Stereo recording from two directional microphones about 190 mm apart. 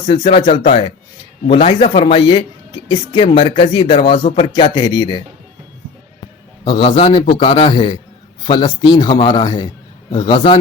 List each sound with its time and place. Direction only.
0.0 s speech: 30° left (ahead or behind)
6.7 s speech: 25° left (ahead or behind)